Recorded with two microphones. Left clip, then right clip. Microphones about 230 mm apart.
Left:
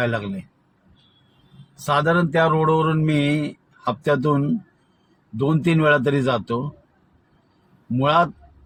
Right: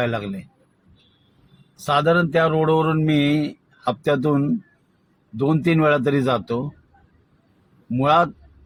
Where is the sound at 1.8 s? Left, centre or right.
Left.